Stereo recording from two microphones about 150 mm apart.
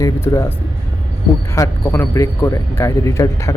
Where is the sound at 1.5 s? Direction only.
20° left (ahead or behind).